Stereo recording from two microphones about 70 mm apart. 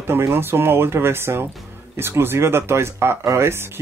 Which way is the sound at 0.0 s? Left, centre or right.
Right.